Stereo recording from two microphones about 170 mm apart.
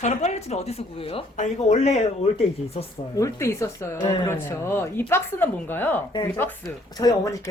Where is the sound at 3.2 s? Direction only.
15° left (ahead or behind).